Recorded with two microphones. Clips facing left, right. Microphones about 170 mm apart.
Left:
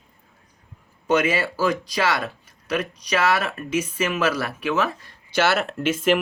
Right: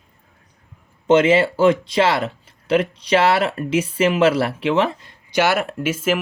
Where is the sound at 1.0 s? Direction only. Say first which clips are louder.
Right 7 dB; 25° right (ahead or behind).